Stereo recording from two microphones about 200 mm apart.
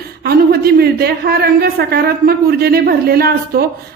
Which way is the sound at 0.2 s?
50° right (ahead or behind).